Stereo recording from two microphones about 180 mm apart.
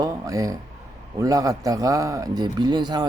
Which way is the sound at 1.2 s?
20° right (ahead or behind).